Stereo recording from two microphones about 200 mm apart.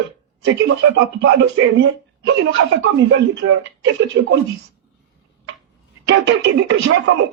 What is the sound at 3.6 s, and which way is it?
Speech, 65° right (ahead or behind).